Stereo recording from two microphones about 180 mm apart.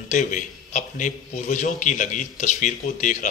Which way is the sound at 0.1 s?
45° left (ahead or behind).